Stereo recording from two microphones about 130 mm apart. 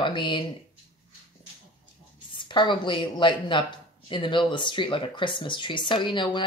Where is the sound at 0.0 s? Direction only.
40° left (ahead or behind).